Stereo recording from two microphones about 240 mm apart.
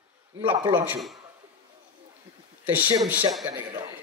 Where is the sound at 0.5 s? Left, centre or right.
Centre.